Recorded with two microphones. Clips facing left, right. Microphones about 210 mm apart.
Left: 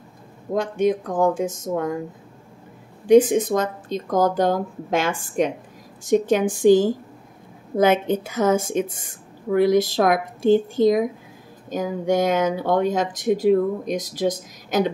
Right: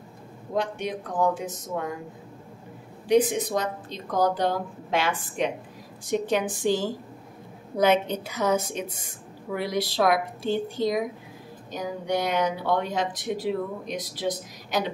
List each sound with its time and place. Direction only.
0.6 s speech: 45° left (ahead or behind)
3.1 s speech: 50° left (ahead or behind)